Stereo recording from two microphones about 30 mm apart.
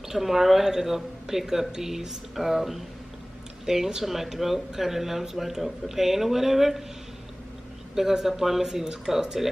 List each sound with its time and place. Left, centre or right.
0.1 s speech: centre
8.0 s speech: centre